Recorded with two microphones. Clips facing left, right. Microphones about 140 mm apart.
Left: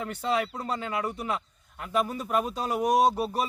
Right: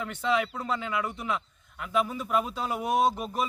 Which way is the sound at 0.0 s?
40° left (ahead or behind).